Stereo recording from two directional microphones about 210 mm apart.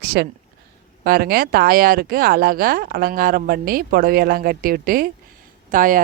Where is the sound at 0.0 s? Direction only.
50° right (ahead or behind).